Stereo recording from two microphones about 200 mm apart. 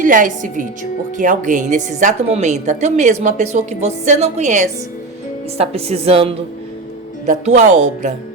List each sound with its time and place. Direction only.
0.0 s a woman's voice: 40° right (ahead or behind)